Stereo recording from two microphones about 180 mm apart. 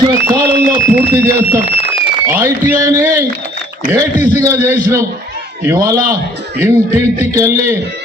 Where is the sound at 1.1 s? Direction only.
15° right (ahead or behind).